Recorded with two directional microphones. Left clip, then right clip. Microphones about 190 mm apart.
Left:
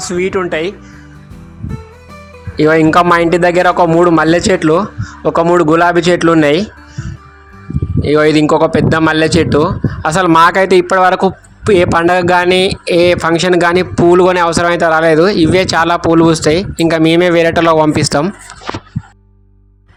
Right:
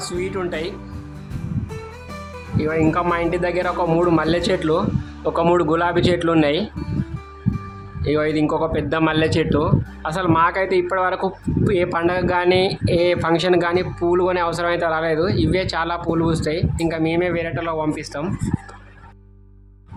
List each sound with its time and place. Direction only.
0.1 s a man's voice: 30° left (ahead or behind)
2.6 s a man's voice: 40° left (ahead or behind)
8.0 s speech: 35° left (ahead or behind)